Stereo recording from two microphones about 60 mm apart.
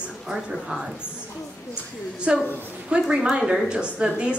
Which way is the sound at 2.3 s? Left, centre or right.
Centre.